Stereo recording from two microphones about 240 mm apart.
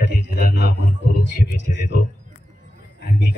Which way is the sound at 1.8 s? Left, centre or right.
Left.